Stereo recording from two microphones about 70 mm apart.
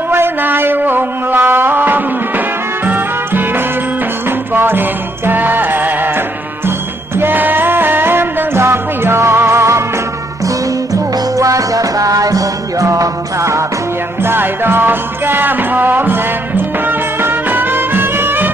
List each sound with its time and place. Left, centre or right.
0.1 s music: right
7.2 s music: right
10.4 s music: right
14.2 s music: right